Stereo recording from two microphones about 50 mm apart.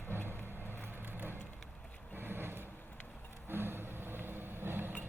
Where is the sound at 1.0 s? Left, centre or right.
Right.